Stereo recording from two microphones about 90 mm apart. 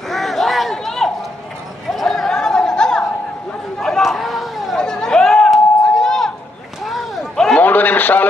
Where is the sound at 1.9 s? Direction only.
5° left (ahead or behind).